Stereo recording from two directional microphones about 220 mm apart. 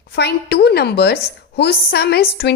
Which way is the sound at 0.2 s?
50° left (ahead or behind).